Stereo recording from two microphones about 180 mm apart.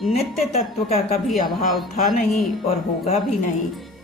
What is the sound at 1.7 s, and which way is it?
Speech, centre (ahead or behind).